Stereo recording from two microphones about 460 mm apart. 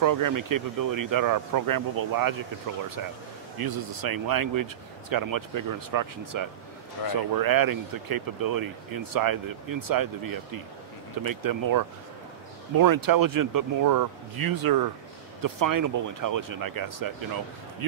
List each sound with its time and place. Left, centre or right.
0.0 s speech: right
7.0 s speech: left
7.3 s speech: right